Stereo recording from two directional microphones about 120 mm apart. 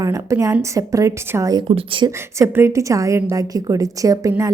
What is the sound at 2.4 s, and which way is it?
A woman's voice, 25° right (ahead or behind).